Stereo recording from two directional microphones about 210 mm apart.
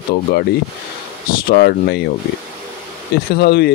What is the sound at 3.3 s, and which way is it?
Speech, 50° left (ahead or behind).